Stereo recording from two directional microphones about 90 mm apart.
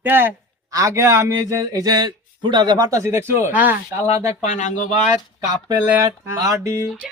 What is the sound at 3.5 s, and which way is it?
Speech, 20° right (ahead or behind).